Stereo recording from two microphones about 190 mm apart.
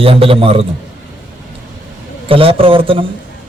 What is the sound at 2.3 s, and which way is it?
Speech, 30° right (ahead or behind).